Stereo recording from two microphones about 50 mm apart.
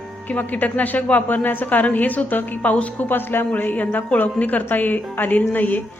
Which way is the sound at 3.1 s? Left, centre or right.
Left.